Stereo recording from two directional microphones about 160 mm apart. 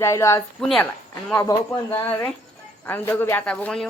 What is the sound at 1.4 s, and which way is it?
Speech, 20° left (ahead or behind).